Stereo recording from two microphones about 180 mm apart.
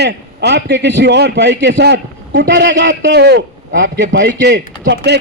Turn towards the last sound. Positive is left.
turn(degrees=-70)  # may be behind; listen again after turning